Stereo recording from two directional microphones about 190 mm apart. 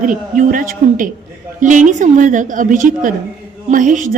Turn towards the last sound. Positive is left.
turn(degrees=-45)  # may be behind; listen again after turning